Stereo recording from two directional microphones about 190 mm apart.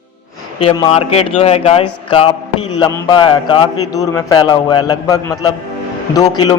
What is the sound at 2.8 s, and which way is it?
A man's voice, 20° left (ahead or behind).